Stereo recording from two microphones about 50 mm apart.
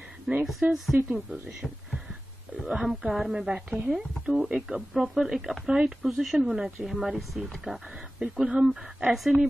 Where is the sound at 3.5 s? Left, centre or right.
Right.